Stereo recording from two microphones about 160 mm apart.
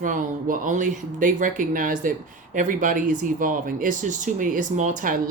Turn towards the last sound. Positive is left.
turn(degrees=-55)  # may be behind; listen again after turning